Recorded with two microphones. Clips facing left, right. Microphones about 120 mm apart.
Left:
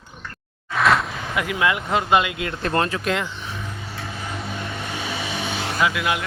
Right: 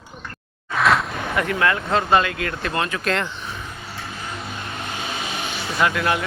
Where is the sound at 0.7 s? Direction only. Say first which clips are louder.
Even; centre (ahead or behind); by 2.5 s 20° left (ahead or behind).